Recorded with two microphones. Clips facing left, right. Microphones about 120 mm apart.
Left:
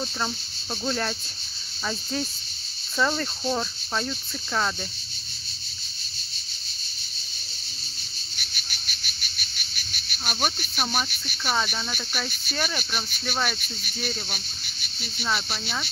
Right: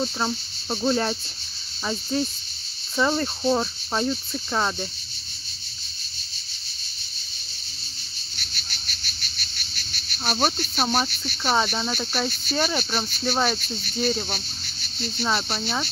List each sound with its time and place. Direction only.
0.0 s speech: 15° right (ahead or behind)
1.9 s cricket: 5° right (ahead or behind)
3.0 s speech: 20° right (ahead or behind)
8.4 s cricket: 10° left (ahead or behind)
10.1 s speech: 30° right (ahead or behind)
15.2 s speech: 25° right (ahead or behind)